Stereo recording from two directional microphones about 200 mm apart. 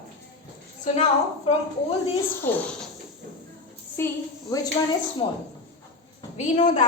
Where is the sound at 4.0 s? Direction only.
10° left (ahead or behind).